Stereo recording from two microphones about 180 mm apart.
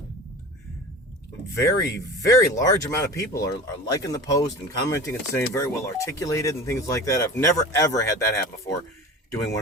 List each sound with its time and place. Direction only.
1.5 s speech: 15° left (ahead or behind)